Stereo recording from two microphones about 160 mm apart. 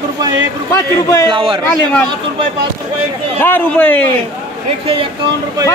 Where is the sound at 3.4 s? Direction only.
10° left (ahead or behind).